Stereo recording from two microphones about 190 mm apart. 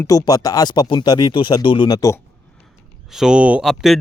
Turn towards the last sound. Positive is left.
turn(degrees=0)  # may be behind; listen again after turning